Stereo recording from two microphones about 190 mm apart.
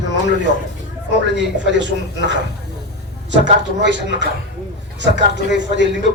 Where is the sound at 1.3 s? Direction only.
70° right (ahead or behind).